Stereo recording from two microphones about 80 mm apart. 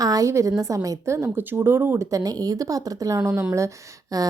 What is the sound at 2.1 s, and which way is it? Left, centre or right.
A woman's voice, right.